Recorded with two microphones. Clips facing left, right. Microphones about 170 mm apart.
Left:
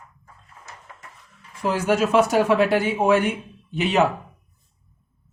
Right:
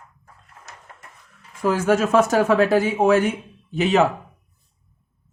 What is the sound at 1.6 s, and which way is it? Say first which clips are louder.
Speech: right 2 dB; 45° right (ahead or behind).